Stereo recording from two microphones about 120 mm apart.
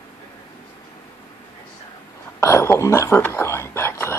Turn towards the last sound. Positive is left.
turn(degrees=20)  # may be behind; listen again after turning